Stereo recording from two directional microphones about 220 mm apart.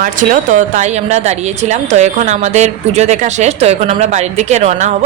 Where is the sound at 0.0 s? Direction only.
35° right (ahead or behind).